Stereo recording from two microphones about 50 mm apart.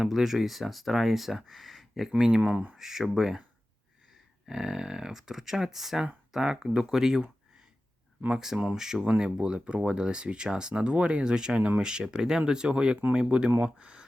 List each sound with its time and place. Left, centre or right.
0.0 s speech: centre
2.1 s speech: centre
4.4 s speech: centre
8.7 s speech: centre